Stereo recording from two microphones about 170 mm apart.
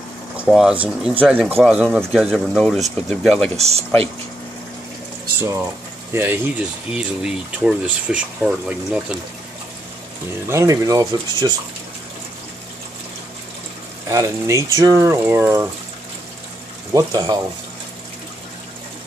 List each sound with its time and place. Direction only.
0.5 s speech: 5° right (ahead or behind)
3.5 s speech: 40° right (ahead or behind)
6.1 s speech: 15° right (ahead or behind)
10.5 s speech: 20° right (ahead or behind)
14.0 s speech: 20° right (ahead or behind)
16.9 s speech: 20° right (ahead or behind)